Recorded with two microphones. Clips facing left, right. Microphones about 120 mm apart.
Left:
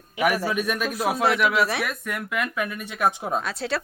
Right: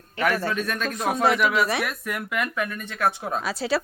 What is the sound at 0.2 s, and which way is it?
Speech, 10° left (ahead or behind).